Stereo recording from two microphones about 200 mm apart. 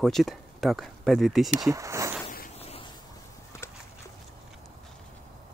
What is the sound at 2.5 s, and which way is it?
Vehicle, 30° left (ahead or behind).